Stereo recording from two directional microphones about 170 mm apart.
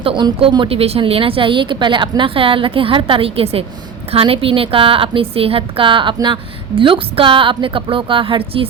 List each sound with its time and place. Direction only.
0.0 s a woman's voice: 30° right (ahead or behind)